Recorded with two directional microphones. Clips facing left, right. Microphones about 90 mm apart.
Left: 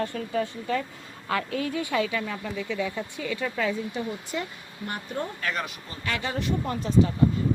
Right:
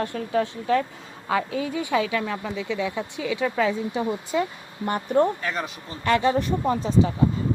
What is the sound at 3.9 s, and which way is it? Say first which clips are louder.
Speech: right 6 dB; 40° right (ahead or behind).